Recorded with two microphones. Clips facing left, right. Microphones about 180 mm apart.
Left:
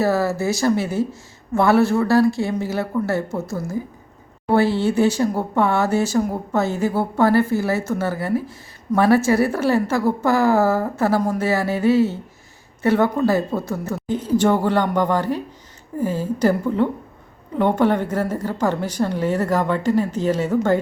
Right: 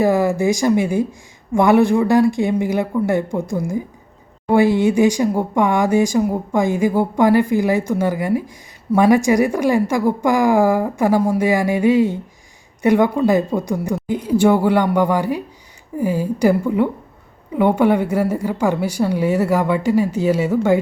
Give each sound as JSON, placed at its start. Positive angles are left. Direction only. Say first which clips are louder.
{"t": 0.0, "sound": "speech", "louder": "right 4 dB", "side_deg": -15}